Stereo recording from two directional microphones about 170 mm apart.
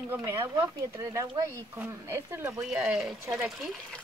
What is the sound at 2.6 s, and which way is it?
Speech, 5° right (ahead or behind).